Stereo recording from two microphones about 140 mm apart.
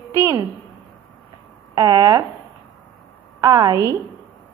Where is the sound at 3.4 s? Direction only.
25° right (ahead or behind).